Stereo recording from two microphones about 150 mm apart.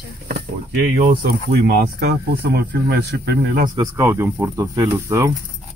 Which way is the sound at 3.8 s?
15° right (ahead or behind).